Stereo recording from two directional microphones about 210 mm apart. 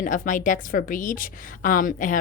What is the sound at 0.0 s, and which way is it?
A woman's voice, 40° left (ahead or behind).